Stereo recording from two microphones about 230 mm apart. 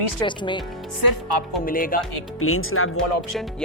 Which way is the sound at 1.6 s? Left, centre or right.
Left.